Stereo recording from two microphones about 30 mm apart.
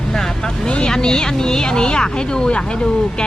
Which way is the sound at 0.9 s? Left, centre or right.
Left.